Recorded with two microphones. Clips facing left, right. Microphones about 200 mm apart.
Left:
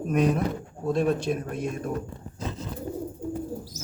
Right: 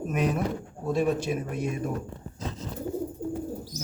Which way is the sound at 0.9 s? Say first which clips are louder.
Left 1 dB; 5° right (ahead or behind).